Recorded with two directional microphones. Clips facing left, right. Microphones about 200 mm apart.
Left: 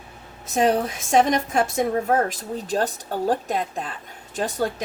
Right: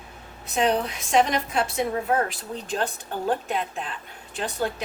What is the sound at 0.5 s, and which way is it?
A woman's voice, 45° left (ahead or behind).